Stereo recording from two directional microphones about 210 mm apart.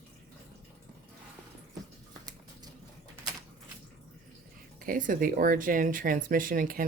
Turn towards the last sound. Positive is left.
turn(degrees=-40)  # may be behind; listen again after turning